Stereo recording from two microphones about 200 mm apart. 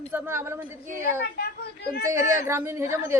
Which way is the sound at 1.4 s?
55° left (ahead or behind).